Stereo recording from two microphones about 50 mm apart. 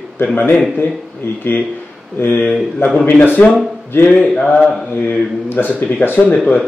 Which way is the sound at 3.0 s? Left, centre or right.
Left.